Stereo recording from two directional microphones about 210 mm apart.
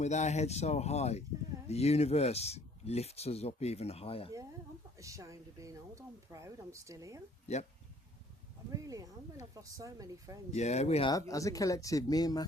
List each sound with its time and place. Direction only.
0.0 s speech: 35° left (ahead or behind)
4.9 s speech: 15° right (ahead or behind)
7.5 s speech: 30° left (ahead or behind)
8.7 s speech: 15° right (ahead or behind)
10.5 s speech: 30° left (ahead or behind)
11.1 s speech: 15° left (ahead or behind)